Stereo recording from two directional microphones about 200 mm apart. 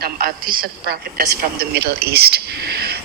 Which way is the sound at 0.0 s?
45° right (ahead or behind).